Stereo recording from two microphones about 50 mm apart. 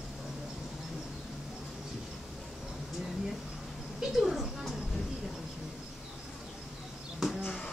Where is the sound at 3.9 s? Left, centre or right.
Centre.